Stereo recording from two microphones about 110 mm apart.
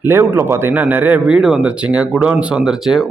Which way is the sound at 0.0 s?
20° right (ahead or behind).